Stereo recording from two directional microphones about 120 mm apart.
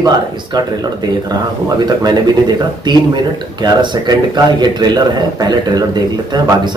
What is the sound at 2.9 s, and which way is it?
Speech, 40° right (ahead or behind).